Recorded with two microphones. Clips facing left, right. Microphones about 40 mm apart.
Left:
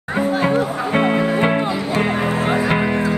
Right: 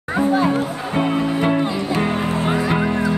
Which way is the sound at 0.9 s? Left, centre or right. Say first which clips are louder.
Left 2 dB; left.